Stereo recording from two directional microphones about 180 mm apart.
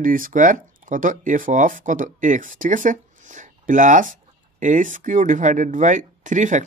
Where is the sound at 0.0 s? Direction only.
50° right (ahead or behind).